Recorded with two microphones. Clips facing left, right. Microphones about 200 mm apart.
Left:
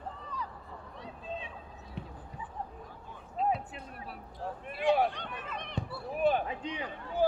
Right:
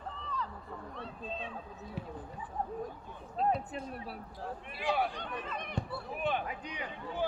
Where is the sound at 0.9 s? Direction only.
15° left (ahead or behind).